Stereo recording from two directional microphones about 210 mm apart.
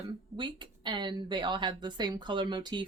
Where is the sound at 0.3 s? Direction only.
20° right (ahead or behind).